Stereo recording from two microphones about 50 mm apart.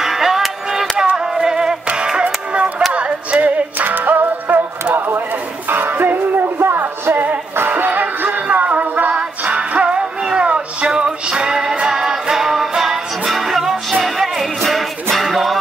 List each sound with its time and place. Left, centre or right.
0.0 s music: centre; by 3.6 s right
3.7 s music: right; by 15.6 s centre